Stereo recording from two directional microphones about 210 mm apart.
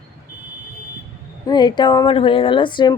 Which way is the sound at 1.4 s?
20° left (ahead or behind).